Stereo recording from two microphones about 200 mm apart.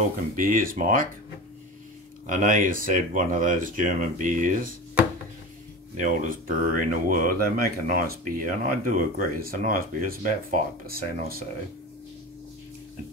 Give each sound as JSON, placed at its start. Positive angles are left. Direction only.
{"t": 0.4, "sound": "speech", "side_deg": -45}
{"t": 2.2, "sound": "speech", "side_deg": -40}
{"t": 5.9, "sound": "speech", "side_deg": -40}